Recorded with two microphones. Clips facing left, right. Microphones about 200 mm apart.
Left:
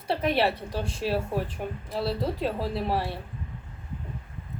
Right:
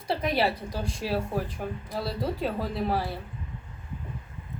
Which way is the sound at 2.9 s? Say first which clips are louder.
Even; centre (ahead or behind).